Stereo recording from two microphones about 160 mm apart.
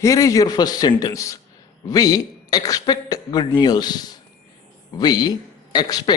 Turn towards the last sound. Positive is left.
turn(degrees=25)  # may be behind; listen again after turning